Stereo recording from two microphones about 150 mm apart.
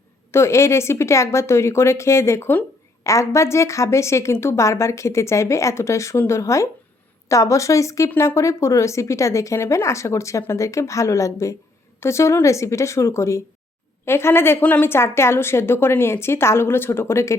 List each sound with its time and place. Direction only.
0.3 s a woman's voice: 20° left (ahead or behind)